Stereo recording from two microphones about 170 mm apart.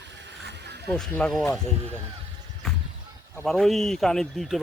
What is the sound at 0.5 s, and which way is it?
Snake, 80° right.